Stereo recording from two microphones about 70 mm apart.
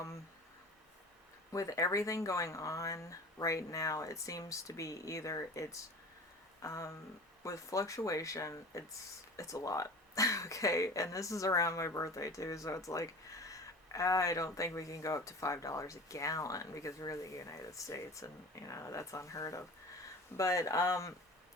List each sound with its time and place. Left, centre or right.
1.5 s speech: left